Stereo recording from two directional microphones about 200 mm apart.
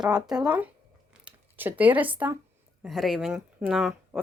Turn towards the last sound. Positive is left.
turn(degrees=0)  # may be behind; listen again after turning